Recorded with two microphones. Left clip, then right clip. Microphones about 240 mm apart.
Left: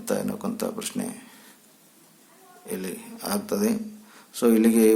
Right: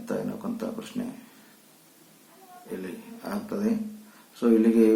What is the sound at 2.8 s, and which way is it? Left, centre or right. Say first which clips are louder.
Speech: left 4 dB; left.